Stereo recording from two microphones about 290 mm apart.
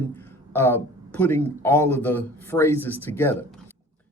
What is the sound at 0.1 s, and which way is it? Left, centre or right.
Speech, centre.